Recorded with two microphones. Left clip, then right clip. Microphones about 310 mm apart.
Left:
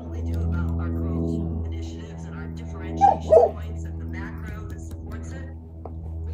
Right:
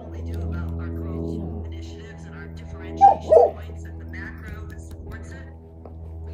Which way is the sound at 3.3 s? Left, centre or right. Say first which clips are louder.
Left 1 dB; right.